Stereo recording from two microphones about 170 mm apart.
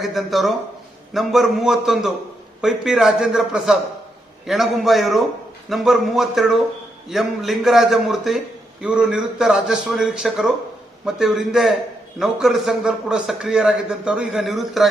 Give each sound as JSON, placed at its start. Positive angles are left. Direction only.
{"t": 0.0, "sound": "a man's voice", "side_deg": 0}